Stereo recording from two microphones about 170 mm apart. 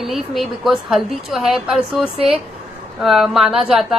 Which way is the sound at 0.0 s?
Centre (ahead or behind).